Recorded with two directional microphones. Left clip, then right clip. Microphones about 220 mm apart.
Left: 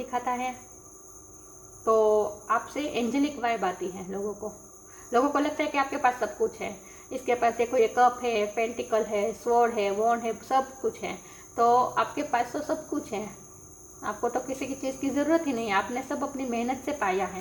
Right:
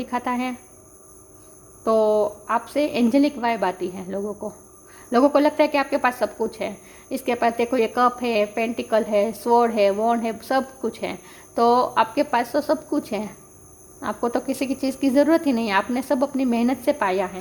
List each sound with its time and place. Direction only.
0.0 s speech: 55° right (ahead or behind)
1.8 s speech: 50° right (ahead or behind)